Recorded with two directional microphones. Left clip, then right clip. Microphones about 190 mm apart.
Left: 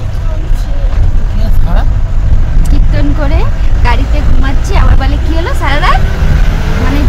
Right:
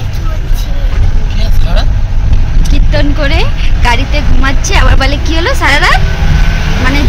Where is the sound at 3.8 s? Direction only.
15° right (ahead or behind).